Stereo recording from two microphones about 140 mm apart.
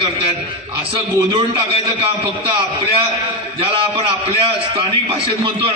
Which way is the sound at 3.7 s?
40° right (ahead or behind).